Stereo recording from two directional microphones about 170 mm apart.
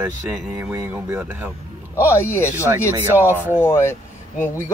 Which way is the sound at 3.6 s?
15° left (ahead or behind).